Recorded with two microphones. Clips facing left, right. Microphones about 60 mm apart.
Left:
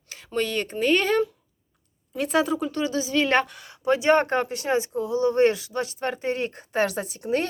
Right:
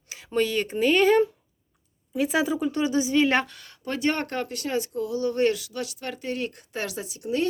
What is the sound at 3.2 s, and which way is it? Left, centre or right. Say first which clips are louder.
Speech: left 1 dB; centre.